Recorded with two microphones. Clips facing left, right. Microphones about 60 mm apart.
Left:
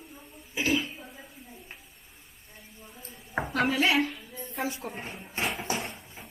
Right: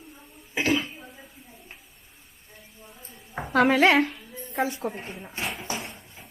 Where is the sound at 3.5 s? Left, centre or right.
Right.